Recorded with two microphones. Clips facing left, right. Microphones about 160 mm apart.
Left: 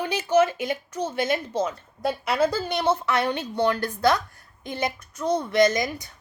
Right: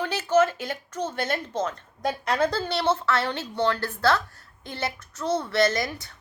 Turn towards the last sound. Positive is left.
turn(degrees=15)  # may be behind; listen again after turning